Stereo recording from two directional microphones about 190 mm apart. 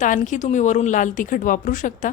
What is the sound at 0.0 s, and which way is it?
Speech, 40° left (ahead or behind).